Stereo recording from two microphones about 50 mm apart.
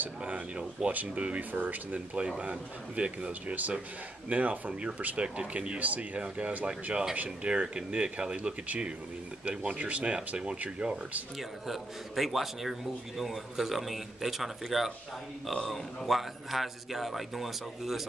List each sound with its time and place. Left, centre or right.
0.2 s speech: right
2.1 s speech: centre
5.8 s speech: right
11.6 s a man's voice: centre